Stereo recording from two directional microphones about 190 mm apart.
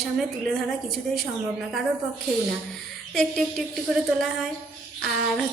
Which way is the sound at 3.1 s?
Centre (ahead or behind).